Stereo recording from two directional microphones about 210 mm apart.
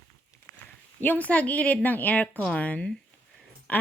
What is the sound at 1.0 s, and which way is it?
Speech, 10° left (ahead or behind).